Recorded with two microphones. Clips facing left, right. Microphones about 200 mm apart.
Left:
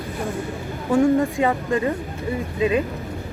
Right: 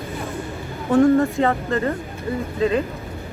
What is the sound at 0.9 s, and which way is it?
Speech, 10° left (ahead or behind).